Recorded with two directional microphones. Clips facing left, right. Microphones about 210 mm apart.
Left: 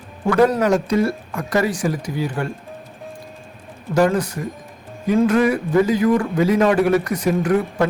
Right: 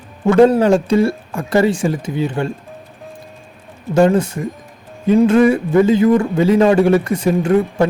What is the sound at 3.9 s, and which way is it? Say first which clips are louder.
A man's voice: right 4 dB; 25° right (ahead or behind).